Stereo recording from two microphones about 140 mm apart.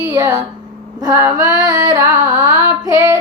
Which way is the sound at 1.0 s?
25° right (ahead or behind).